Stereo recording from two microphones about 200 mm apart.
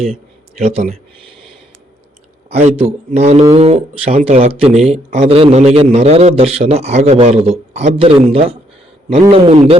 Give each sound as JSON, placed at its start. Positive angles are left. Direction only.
{"t": 0.0, "sound": "a man's voice", "side_deg": -30}
{"t": 2.6, "sound": "a man's voice", "side_deg": -30}